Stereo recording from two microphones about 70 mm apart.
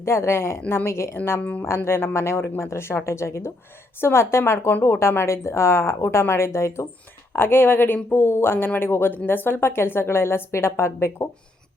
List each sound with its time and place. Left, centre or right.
0.0 s speech: left